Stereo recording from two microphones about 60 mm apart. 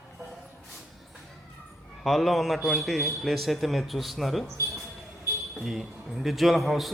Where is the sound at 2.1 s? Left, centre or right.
Centre.